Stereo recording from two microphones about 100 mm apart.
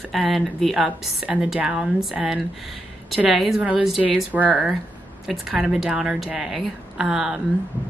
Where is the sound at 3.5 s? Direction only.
15° right (ahead or behind).